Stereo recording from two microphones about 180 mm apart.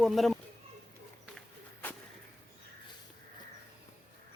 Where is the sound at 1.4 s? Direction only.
10° left (ahead or behind).